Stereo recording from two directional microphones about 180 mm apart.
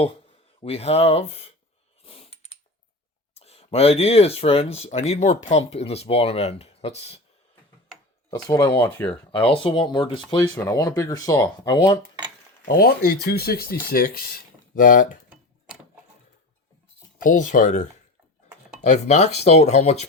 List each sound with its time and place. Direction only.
0.6 s speech: 35° left (ahead or behind)
2.0 s a sound: 35° left (ahead or behind)
3.3 s speech: 35° left (ahead or behind)
8.4 s speech: 20° left (ahead or behind)
9.5 s speech: 30° left (ahead or behind)
12.6 s speech: 65° left (ahead or behind); by 15.2 s 50° left (ahead or behind)
17.2 s speech: 45° left (ahead or behind)